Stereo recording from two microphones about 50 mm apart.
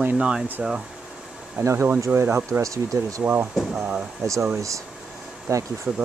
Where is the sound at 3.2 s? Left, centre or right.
Right.